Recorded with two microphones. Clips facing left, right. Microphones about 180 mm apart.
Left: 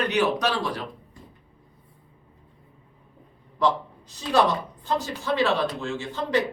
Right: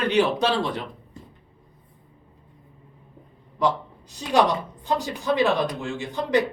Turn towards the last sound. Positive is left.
turn(degrees=-15)  # may be behind; listen again after turning